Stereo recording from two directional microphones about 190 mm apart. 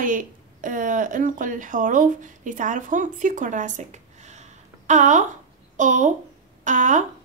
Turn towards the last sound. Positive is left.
turn(degrees=-40)  # may be behind; listen again after turning